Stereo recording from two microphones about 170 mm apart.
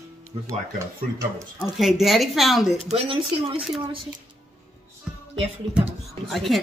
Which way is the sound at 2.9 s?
35° right (ahead or behind).